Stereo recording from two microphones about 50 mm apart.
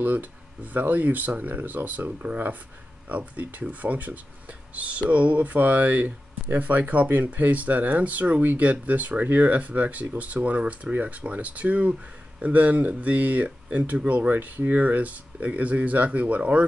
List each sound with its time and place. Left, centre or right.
0.0 s speech: right